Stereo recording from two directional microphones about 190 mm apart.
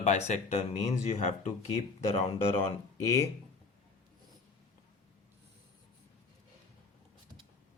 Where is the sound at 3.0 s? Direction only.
15° left (ahead or behind).